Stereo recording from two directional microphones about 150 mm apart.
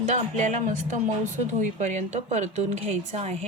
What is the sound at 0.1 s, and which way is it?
A woman's voice, 55° right (ahead or behind).